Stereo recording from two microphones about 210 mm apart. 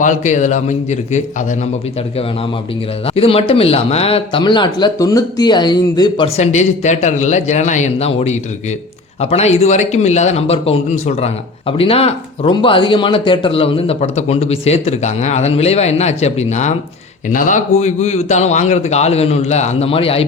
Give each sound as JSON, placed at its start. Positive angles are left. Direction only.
{"t": 0.0, "sound": "a man's voice", "side_deg": 35}
{"t": 3.2, "sound": "a man's voice", "side_deg": 30}